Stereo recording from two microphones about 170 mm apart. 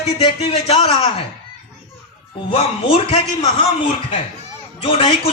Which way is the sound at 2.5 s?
35° left (ahead or behind).